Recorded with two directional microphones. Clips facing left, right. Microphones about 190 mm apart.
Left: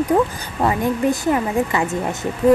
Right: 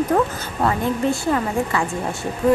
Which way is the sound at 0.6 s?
15° left (ahead or behind).